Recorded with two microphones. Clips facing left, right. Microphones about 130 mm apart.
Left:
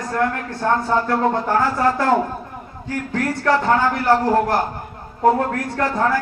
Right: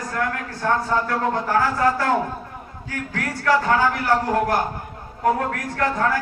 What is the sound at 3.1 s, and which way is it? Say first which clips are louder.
A man's voice: left 2 dB; 25° left (ahead or behind).